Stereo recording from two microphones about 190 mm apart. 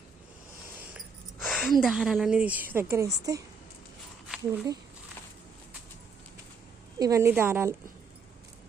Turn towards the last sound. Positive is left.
turn(degrees=-10)  # may be behind; listen again after turning